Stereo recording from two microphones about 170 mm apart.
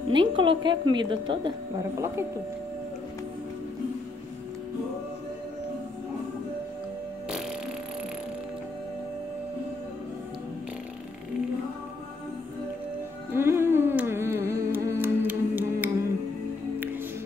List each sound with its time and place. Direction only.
0.1 s a woman's voice: 30° right (ahead or behind)
1.8 s speech: 15° right (ahead or behind)
13.3 s music: 15° right (ahead or behind)